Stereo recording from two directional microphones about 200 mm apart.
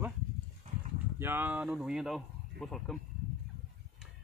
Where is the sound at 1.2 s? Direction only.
10° right (ahead or behind).